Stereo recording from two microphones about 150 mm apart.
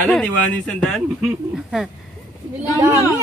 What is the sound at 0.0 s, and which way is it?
Speech, 10° left (ahead or behind).